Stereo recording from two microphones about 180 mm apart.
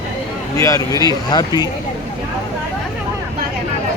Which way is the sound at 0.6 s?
15° left (ahead or behind).